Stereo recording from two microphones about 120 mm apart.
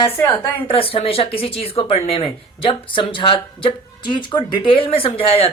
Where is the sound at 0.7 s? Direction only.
50° left (ahead or behind).